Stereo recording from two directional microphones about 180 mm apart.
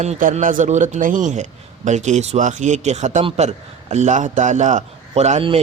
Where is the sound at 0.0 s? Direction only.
45° right (ahead or behind).